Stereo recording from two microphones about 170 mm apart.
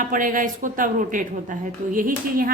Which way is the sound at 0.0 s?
50° right (ahead or behind).